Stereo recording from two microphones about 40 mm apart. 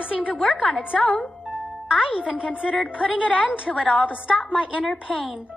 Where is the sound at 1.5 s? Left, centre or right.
Right.